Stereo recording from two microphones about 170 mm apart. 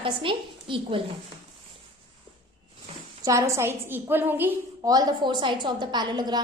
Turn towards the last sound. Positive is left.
turn(degrees=-25)  # may be behind; listen again after turning